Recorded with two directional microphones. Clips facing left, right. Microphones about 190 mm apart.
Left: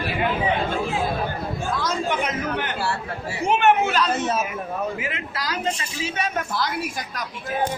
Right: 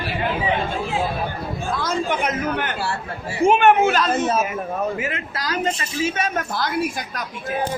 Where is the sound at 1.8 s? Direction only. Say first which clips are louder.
Right 3 dB; 55° right (ahead or behind).